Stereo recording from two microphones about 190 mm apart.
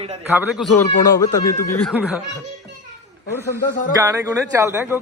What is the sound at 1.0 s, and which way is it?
Speech, 20° left (ahead or behind).